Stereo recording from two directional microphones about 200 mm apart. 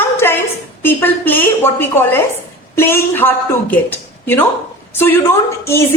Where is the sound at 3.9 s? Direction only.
10° left (ahead or behind).